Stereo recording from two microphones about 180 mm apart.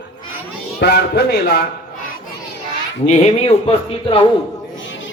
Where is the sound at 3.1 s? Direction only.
35° left (ahead or behind).